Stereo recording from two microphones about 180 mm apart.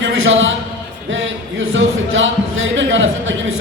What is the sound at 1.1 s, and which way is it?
Speech, 90° right.